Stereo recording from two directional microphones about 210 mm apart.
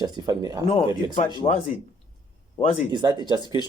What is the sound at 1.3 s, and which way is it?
Speech, 25° left (ahead or behind).